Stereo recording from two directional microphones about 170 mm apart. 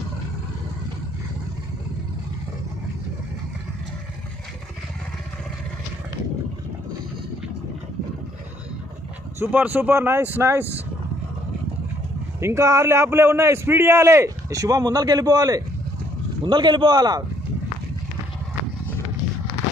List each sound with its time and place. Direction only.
9.4 s a man's voice: 10° right (ahead or behind)
12.4 s a man's voice: 15° right (ahead or behind)